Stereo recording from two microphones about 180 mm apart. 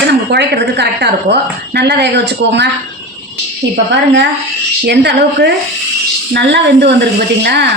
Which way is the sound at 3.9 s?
75° right (ahead or behind).